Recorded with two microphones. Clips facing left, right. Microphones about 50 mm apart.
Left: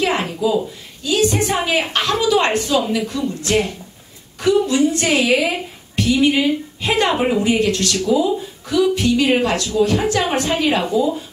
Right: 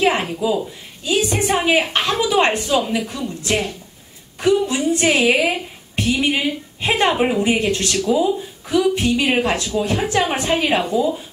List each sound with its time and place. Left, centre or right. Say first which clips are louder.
0.4 s a woman's voice: left 2 dB; right
7.4 s speech: left 1 dB; right